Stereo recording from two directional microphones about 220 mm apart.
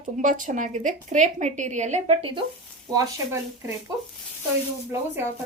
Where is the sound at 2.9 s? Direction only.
15° right (ahead or behind).